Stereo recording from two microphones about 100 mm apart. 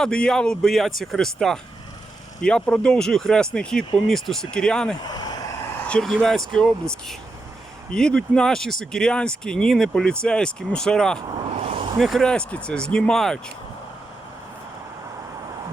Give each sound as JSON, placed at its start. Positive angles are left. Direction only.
{"t": 0.0, "sound": "speech", "side_deg": 10}
{"t": 5.0, "sound": "vehicle", "side_deg": 45}
{"t": 5.9, "sound": "speech", "side_deg": 5}
{"t": 11.6, "sound": "vehicle", "side_deg": -90}
{"t": 11.9, "sound": "speech", "side_deg": 0}